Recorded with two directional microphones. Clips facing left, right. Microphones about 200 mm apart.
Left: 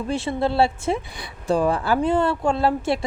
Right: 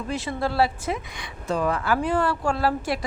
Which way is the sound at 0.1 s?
25° left (ahead or behind).